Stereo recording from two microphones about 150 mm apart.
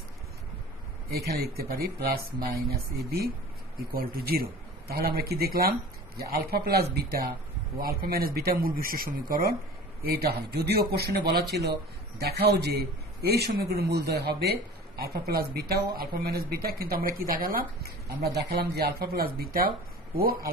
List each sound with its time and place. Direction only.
1.1 s speech: 90° right
3.9 s speech: 85° right